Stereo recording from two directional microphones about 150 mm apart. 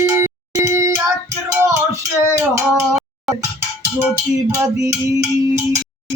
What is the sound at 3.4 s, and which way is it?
Music, 20° right (ahead or behind).